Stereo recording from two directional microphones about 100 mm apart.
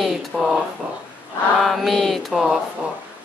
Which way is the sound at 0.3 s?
5° left (ahead or behind).